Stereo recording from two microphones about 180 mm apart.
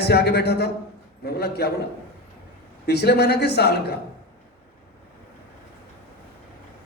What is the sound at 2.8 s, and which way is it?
A man's voice, 65° left (ahead or behind).